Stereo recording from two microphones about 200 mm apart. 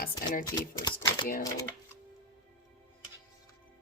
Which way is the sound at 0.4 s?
20° left (ahead or behind).